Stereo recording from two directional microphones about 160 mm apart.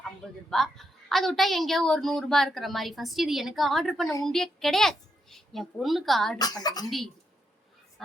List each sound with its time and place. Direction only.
0.5 s a woman's voice: centre (ahead or behind)
6.4 s a woman's voice: 25° left (ahead or behind)